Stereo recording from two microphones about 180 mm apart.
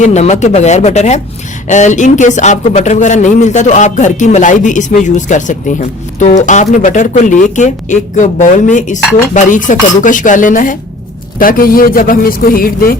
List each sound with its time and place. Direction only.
0.0 s a man's voice: 40° left (ahead or behind)